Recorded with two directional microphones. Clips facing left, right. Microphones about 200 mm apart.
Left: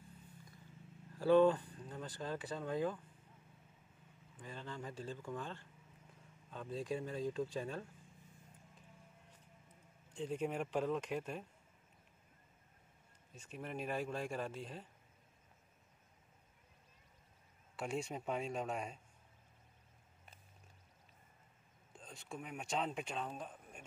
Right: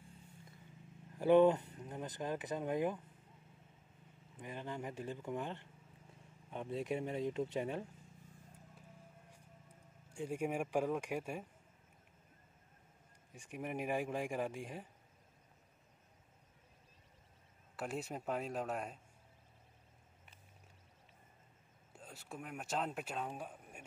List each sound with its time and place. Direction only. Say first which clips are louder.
1.1 s speech: right 1 dB; 20° right (ahead or behind)
4.4 s speech: right 3 dB; 15° right (ahead or behind)
10.1 s speech: right 1 dB; 10° right (ahead or behind)
13.3 s speech: right 3 dB; 15° right (ahead or behind)
17.7 s speech: left 1 dB; 5° right (ahead or behind)
21.9 s speech: left 1 dB; 5° right (ahead or behind)